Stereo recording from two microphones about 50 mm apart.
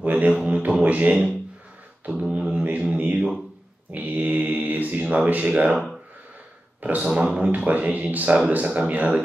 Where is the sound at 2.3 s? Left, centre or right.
Right.